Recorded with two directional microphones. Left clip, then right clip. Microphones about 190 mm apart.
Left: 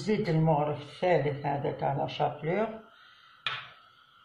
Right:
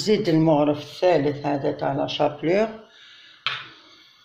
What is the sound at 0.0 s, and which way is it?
Speech, 50° right (ahead or behind).